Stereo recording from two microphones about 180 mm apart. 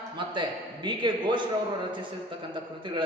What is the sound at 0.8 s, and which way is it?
Speech, 25° right (ahead or behind).